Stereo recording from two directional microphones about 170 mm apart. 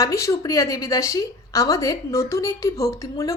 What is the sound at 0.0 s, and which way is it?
A woman's voice, 20° left (ahead or behind).